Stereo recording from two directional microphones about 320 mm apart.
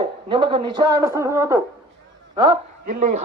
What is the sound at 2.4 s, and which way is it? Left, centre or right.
Speech, centre.